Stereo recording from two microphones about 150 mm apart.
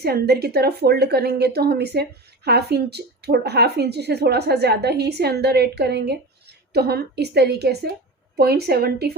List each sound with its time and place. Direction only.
0.0 s speech: 90° right